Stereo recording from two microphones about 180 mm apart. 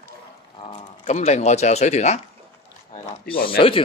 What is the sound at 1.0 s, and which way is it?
A man's voice, 40° left (ahead or behind).